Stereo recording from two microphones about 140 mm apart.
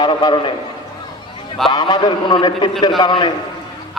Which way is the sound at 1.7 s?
30° left (ahead or behind).